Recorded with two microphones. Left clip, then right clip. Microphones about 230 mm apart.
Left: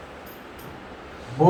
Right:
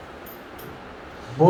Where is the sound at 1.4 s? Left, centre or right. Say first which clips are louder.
Right 1 dB; left.